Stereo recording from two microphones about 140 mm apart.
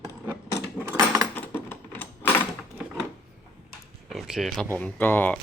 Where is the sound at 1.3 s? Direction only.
15° left (ahead or behind).